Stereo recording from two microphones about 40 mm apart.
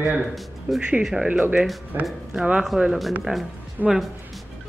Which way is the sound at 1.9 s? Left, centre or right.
Right.